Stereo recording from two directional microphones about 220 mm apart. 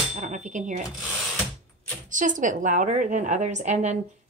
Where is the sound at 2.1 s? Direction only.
35° right (ahead or behind).